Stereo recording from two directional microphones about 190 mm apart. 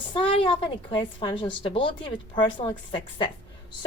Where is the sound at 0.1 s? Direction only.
25° left (ahead or behind).